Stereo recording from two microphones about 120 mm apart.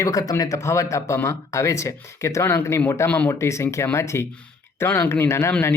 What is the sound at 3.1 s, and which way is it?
Speech, 10° left (ahead or behind).